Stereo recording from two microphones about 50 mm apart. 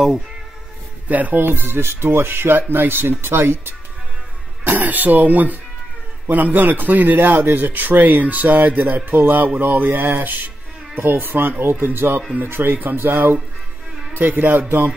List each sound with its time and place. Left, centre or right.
1.0 s speech: right
4.6 s speech: right